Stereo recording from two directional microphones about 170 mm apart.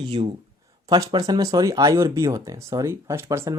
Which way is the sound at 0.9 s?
20° right (ahead or behind).